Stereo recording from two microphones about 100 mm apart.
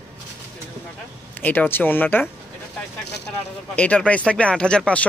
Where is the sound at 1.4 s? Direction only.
20° left (ahead or behind).